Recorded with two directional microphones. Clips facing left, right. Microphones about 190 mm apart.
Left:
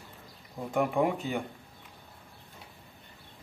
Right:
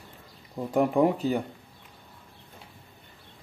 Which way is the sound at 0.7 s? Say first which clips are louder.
Right 5 dB; 35° right (ahead or behind).